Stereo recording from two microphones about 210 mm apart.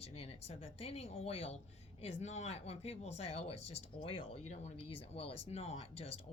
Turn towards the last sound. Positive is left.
turn(degrees=30)  # may be behind; listen again after turning